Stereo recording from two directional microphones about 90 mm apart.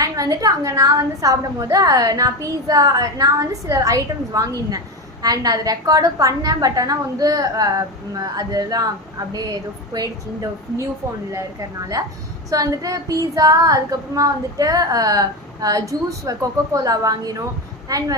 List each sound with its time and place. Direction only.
0.0 s a woman's voice: 40° right (ahead or behind)
12.0 s a woman's voice: 40° right (ahead or behind)